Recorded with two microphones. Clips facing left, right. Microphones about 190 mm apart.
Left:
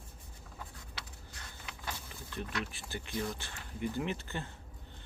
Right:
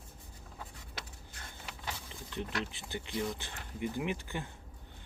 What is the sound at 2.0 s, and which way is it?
Speech, 20° right (ahead or behind).